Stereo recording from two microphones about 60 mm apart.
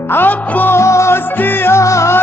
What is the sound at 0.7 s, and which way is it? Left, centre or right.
Music, left.